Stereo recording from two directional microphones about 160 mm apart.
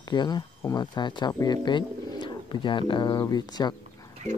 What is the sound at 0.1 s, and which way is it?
Speech, 25° left (ahead or behind).